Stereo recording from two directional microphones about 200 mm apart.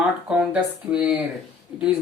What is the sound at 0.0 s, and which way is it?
Speech, 5° right (ahead or behind).